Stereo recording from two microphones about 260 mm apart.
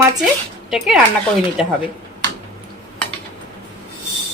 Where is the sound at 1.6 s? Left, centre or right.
Centre.